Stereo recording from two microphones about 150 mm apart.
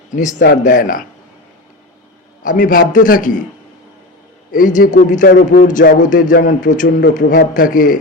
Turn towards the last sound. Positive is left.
turn(degrees=65)  # may be behind; listen again after turning